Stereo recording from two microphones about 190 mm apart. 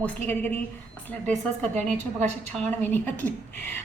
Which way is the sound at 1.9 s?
35° right (ahead or behind).